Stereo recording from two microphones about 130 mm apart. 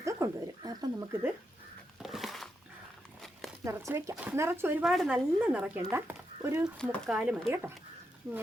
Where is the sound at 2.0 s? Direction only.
Centre (ahead or behind).